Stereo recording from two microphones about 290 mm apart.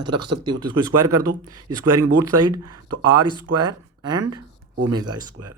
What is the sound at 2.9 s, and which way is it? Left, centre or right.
Speech, right.